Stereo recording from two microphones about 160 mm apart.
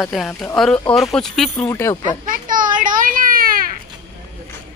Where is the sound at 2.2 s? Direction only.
55° right (ahead or behind).